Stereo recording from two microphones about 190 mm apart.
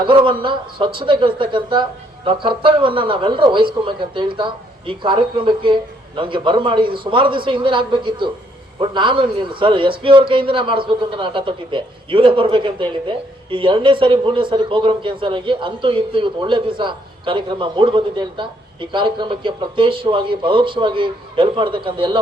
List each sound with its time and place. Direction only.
0.0 s a man's voice: 25° right (ahead or behind)